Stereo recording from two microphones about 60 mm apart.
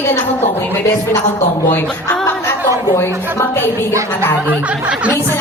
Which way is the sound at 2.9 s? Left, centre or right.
Left.